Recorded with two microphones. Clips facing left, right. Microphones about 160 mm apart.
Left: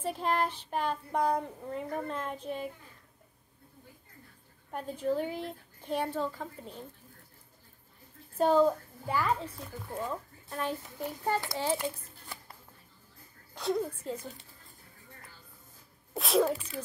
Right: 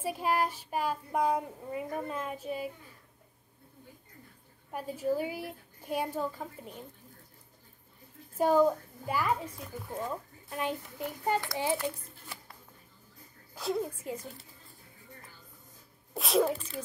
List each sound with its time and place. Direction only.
0.0 s speech: 10° right (ahead or behind)
4.7 s speech: 5° right (ahead or behind)
8.4 s speech: 10° right (ahead or behind)
13.6 s speech: 5° right (ahead or behind)
16.1 s speech: centre (ahead or behind)
16.5 s speech: 10° left (ahead or behind)